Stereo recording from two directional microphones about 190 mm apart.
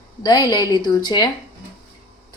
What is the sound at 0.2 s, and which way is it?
A woman's voice, 20° left (ahead or behind).